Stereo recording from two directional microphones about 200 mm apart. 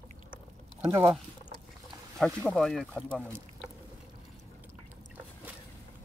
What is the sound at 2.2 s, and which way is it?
Speech, 5° left (ahead or behind).